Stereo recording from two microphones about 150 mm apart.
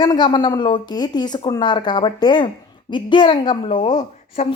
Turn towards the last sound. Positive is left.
turn(degrees=50)  # may be behind; listen again after turning